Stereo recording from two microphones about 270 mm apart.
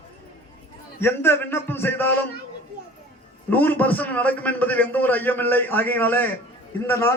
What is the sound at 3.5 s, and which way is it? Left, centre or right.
A man's voice, centre.